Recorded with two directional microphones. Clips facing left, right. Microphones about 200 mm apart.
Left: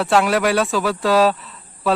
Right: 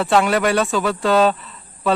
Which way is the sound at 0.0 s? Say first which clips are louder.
Even; centre (ahead or behind).